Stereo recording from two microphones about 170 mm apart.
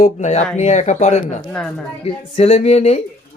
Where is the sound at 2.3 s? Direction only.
40° left (ahead or behind).